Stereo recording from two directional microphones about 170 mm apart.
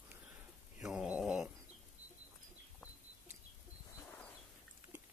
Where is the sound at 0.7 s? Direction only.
5° right (ahead or behind).